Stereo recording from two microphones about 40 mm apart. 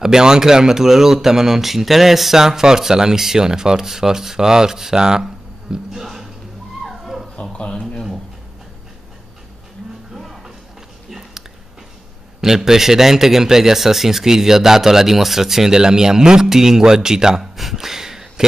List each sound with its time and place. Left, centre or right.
0.0 s speech: centre
6.8 s dog: centre
10.1 s music: centre
11.1 s a sound: centre
12.4 s speech: centre